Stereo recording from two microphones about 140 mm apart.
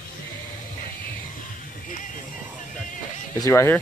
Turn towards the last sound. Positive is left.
turn(degrees=20)  # may be behind; listen again after turning